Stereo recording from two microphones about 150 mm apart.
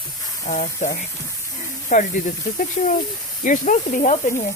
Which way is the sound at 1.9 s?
55° left (ahead or behind).